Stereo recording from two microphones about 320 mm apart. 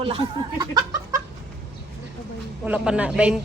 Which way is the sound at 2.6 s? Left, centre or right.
Centre.